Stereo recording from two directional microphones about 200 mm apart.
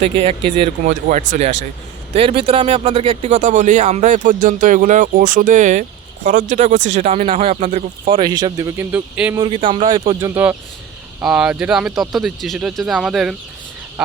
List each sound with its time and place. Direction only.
0.2 s speech: 30° right (ahead or behind)
1.0 s speech: 40° right (ahead or behind)
2.1 s speech: 25° right (ahead or behind); by 9.4 s 10° right (ahead or behind)
9.4 s speech: 25° right (ahead or behind)
10.2 s speech: 10° right (ahead or behind)